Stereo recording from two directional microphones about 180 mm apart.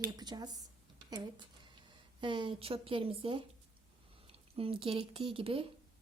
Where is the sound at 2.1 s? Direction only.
25° right (ahead or behind).